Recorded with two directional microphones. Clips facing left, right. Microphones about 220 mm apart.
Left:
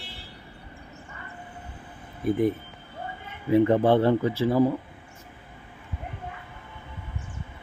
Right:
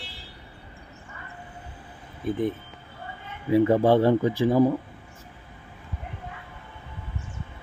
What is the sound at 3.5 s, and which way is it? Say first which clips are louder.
Speech: right 1 dB; 5° right (ahead or behind).